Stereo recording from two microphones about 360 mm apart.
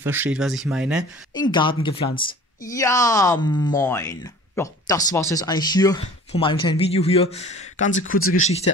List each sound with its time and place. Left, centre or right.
0.0 s speech: centre
1.3 s speech: centre
8.1 s speech: left